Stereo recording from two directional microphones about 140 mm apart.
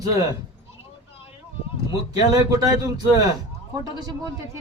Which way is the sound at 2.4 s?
30° right (ahead or behind).